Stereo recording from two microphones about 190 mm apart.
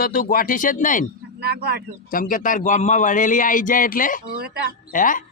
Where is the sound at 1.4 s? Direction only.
55° right (ahead or behind).